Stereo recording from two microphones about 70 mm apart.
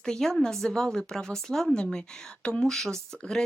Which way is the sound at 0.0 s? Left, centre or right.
Centre.